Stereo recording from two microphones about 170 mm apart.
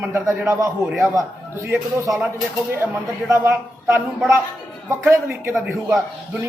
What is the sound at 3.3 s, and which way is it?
A woman's voice, 15° right (ahead or behind).